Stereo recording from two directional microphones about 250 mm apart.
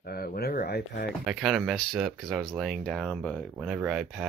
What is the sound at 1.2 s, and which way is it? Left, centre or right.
Speech, centre.